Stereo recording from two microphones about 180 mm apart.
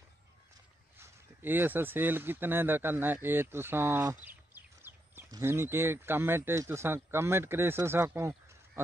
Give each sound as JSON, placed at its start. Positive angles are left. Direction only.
{"t": 0.9, "sound": "speech", "side_deg": -10}